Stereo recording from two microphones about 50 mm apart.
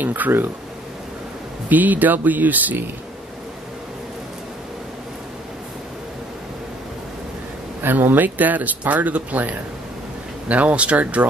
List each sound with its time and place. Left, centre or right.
0.0 s a sound: right
1.7 s speech: right
7.8 s speech: right